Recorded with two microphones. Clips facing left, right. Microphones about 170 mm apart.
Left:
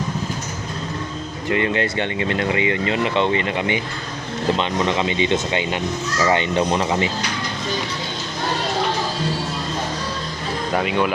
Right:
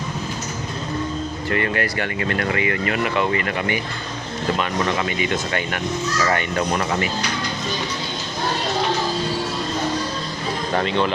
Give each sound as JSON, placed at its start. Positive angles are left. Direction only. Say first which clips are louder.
{"t": 1.5, "sound": "speech", "louder": "left 3 dB", "side_deg": 20}
{"t": 10.7, "sound": "speech", "louder": "left 1 dB", "side_deg": 10}